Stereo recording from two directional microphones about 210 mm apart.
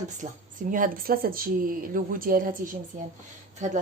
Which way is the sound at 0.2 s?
35° right (ahead or behind).